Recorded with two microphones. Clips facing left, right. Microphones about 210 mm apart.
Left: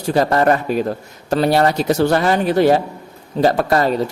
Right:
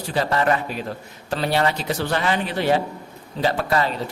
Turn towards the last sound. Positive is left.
turn(degrees=45)  # may be behind; listen again after turning